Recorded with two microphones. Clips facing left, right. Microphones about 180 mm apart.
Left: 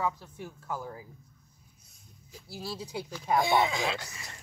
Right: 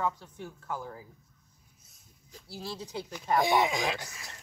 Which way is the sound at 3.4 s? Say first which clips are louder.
Right 1 dB; 15° right (ahead or behind).